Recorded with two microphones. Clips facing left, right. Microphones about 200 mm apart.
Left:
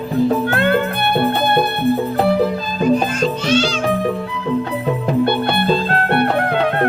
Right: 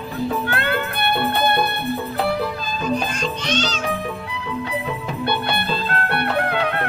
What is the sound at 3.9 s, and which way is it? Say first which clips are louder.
Music: left 7 dB; 40° left (ahead or behind).